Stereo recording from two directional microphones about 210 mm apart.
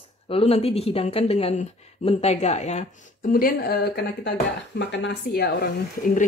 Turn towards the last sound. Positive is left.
turn(degrees=45)  # may be behind; listen again after turning